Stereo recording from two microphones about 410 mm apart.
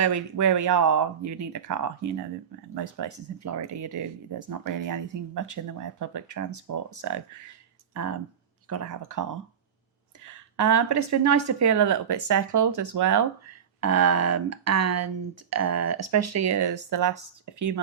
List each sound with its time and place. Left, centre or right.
0.0 s speech: right